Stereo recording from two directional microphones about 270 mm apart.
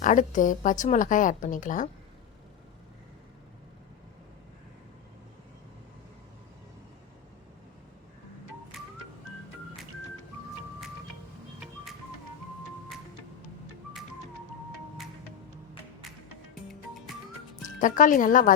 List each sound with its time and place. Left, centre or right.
0.0 s a woman's voice: left
17.7 s a woman's voice: left